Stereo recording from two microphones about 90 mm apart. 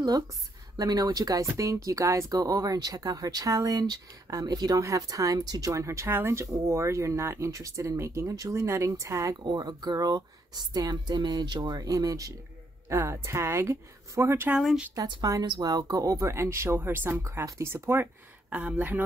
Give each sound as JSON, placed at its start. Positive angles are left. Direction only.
{"t": 0.7, "sound": "speech", "side_deg": -45}
{"t": 2.3, "sound": "speech", "side_deg": -45}
{"t": 9.4, "sound": "speech", "side_deg": -50}
{"t": 15.2, "sound": "speech", "side_deg": -40}